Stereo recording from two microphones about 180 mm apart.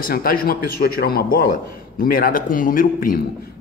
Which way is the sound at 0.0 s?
55° left (ahead or behind).